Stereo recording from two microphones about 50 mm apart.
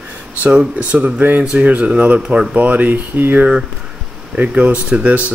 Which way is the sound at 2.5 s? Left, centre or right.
Right.